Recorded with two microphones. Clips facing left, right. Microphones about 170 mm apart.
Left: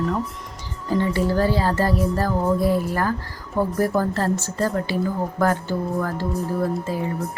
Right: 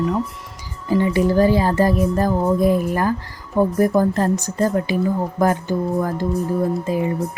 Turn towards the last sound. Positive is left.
turn(degrees=-15)  # may be behind; listen again after turning